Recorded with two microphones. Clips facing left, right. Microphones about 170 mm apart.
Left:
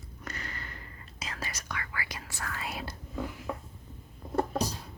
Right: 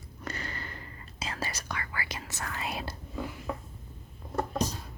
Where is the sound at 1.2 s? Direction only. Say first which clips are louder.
Right 4 dB; 30° right (ahead or behind).